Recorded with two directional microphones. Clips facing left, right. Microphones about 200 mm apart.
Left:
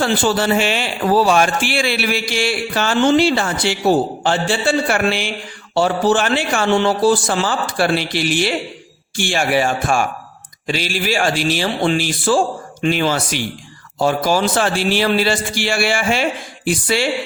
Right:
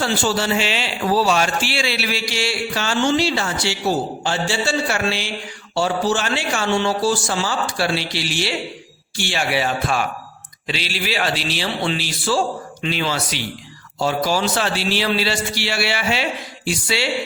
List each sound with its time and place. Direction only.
0.0 s a man's voice: 55° left (ahead or behind)